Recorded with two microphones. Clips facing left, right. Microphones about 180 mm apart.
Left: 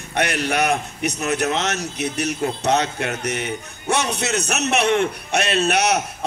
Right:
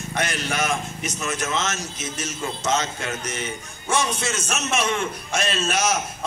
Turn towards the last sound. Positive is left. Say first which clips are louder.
# left 5 dB
turn(degrees=65)  # may be behind; listen again after turning